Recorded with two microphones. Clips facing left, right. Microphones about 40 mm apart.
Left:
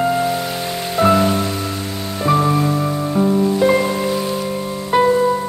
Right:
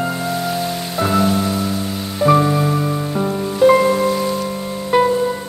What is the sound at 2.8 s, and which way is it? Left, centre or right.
Music, centre.